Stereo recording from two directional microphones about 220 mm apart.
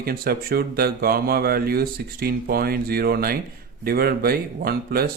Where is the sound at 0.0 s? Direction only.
45° right (ahead or behind).